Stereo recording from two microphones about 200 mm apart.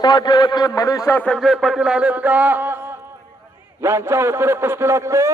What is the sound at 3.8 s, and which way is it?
A man's voice, 10° right (ahead or behind).